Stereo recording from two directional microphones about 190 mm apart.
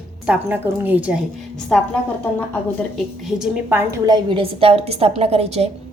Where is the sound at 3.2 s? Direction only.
5° right (ahead or behind); by 5.7 s 30° right (ahead or behind).